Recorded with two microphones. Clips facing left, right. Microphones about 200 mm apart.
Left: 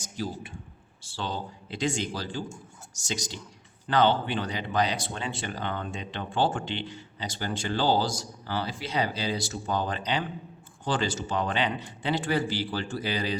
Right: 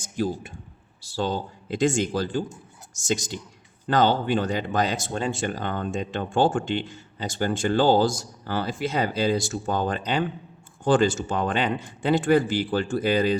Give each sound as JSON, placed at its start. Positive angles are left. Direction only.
{"t": 0.0, "sound": "a man's voice", "side_deg": -50}